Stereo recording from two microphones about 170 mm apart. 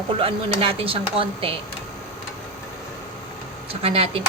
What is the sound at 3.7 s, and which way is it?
Speech, 35° right (ahead or behind).